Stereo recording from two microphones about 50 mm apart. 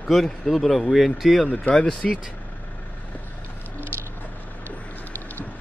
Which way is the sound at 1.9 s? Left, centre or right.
Centre.